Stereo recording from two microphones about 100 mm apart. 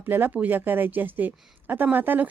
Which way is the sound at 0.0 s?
20° right (ahead or behind).